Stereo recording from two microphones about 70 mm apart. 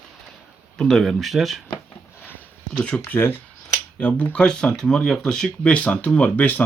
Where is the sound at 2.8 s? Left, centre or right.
Centre.